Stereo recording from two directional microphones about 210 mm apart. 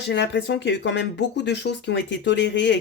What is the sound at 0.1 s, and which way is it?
Speech, 55° left (ahead or behind).